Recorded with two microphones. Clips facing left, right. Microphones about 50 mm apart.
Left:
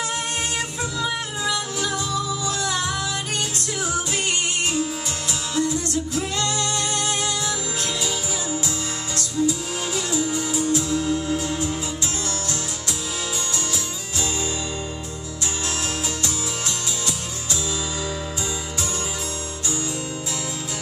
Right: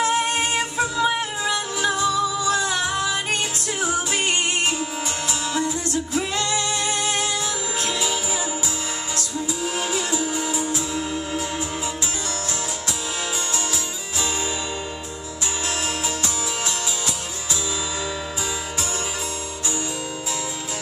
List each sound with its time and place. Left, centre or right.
0.0 s music: right
5.6 s music: centre
9.1 s music: centre